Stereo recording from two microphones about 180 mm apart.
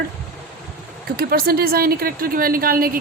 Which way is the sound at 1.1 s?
55° right (ahead or behind).